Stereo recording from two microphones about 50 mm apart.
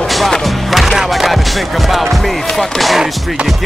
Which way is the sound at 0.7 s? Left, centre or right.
Centre.